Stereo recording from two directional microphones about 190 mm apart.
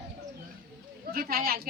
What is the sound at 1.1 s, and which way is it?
Speech, 55° right (ahead or behind).